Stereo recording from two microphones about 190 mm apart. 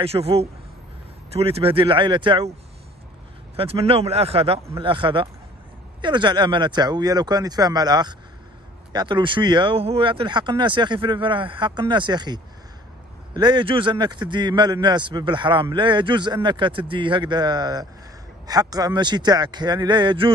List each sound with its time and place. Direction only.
0.0 s speech: 30° right (ahead or behind)
3.5 s speech: 30° right (ahead or behind)